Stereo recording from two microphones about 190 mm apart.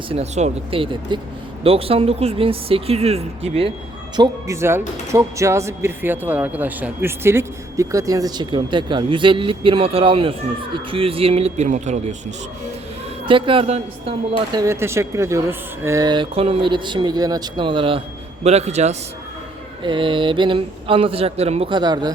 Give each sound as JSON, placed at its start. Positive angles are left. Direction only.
{"t": 0.1, "sound": "speech", "side_deg": -35}
{"t": 4.2, "sound": "speech", "side_deg": -15}
{"t": 13.2, "sound": "speech", "side_deg": -25}
{"t": 14.5, "sound": "speech", "side_deg": -15}
{"t": 19.8, "sound": "speech", "side_deg": -25}